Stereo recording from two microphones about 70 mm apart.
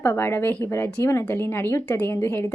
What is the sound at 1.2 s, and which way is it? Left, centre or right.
Speech, left.